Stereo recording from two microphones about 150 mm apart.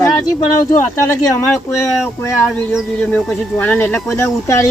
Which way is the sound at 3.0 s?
10° left (ahead or behind).